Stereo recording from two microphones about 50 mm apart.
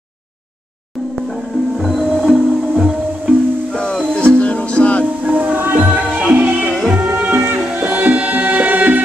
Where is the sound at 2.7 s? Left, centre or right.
Right.